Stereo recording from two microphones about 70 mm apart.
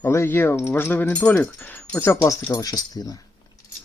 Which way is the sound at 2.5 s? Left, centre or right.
Left.